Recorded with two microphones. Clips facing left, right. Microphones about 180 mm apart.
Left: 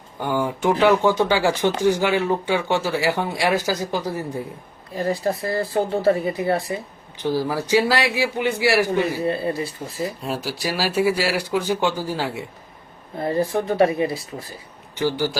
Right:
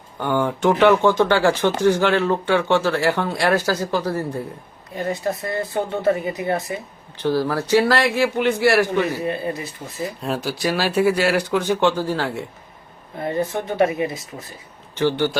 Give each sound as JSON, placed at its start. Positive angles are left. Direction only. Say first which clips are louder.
{"t": 0.2, "sound": "speech", "louder": "right 2 dB", "side_deg": 5}
{"t": 4.9, "sound": "speech", "louder": "left 1 dB", "side_deg": 30}
{"t": 7.2, "sound": "speech", "louder": "right 2 dB", "side_deg": 15}
{"t": 9.2, "sound": "speech", "louder": "left 2 dB", "side_deg": 30}
{"t": 10.2, "sound": "speech", "louder": "right 3 dB", "side_deg": 5}
{"t": 13.1, "sound": "speech", "louder": "left 2 dB", "side_deg": 30}
{"t": 14.9, "sound": "speech", "louder": "right 3 dB", "side_deg": 10}